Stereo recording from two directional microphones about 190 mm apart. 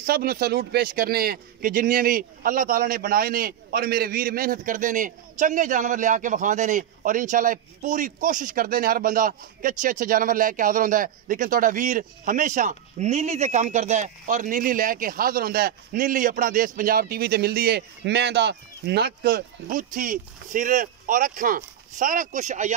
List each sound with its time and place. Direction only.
0.0 s speech: 50° right (ahead or behind)